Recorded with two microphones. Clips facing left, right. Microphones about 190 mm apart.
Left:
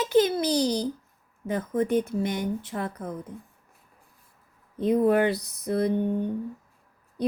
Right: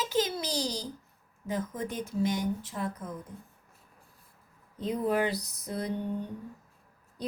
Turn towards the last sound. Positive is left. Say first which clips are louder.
# left 8 dB
turn(degrees=60)  # may be behind; listen again after turning